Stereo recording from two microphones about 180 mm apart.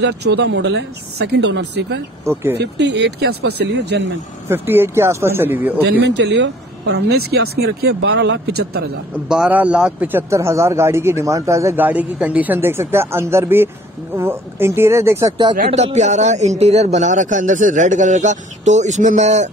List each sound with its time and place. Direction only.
0.0 s speech: 70° right (ahead or behind)
4.5 s a man's voice: 15° right (ahead or behind)
5.9 s speech: 70° right (ahead or behind)
9.3 s a man's voice: 5° right (ahead or behind)
15.7 s speech: 40° right (ahead or behind)